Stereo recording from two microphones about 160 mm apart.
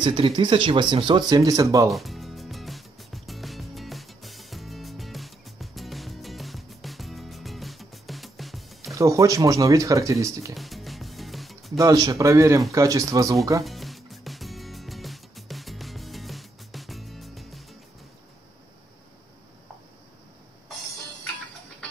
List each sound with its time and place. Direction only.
0.0 s speech: 30° right (ahead or behind)
1.9 s music: centre (ahead or behind)
8.9 s speech: 20° right (ahead or behind)
10.5 s music: centre (ahead or behind)
11.8 s speech: 25° right (ahead or behind)
13.7 s music: centre (ahead or behind)